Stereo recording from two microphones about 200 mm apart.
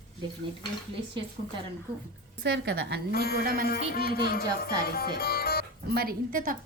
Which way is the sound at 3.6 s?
50° left (ahead or behind).